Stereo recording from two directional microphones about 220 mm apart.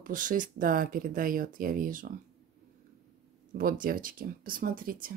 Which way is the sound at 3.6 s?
40° right (ahead or behind).